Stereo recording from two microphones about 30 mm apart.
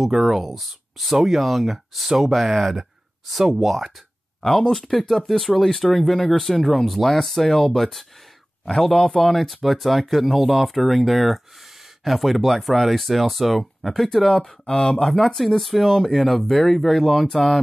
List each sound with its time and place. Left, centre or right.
0.0 s speech: centre
4.4 s speech: centre
8.8 s speech: centre
14.7 s speech: left
15.0 s speech: centre